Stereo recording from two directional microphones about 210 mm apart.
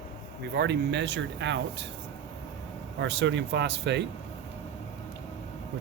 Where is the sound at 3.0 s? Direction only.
60° right (ahead or behind).